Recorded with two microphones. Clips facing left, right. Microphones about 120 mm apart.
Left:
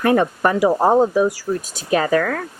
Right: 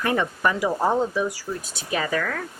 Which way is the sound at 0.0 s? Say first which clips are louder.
Left 7 dB; 50° left (ahead or behind).